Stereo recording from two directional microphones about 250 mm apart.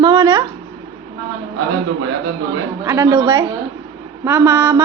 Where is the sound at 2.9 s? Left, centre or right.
Centre.